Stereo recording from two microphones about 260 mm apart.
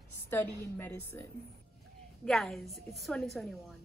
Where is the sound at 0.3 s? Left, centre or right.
Centre.